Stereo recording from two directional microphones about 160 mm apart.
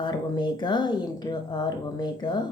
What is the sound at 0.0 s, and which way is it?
Speech, 30° left (ahead or behind).